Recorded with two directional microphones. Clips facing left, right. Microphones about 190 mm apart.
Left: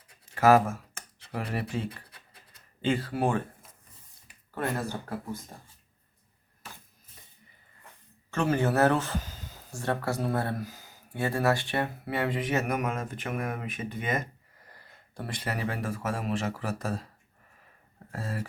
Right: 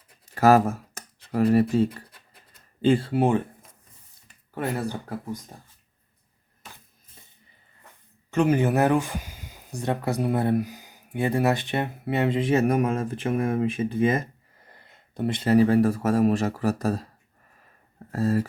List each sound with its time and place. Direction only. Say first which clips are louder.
0.3 s speech: right 3 dB; 40° right (ahead or behind); by 3.4 s 20° right (ahead or behind)
4.5 s speech: right 3 dB; 15° right (ahead or behind)
8.3 s speech: right 5 dB; 15° right (ahead or behind); by 17.1 s 40° right (ahead or behind)
18.1 s speech: right 12 dB; 40° right (ahead or behind)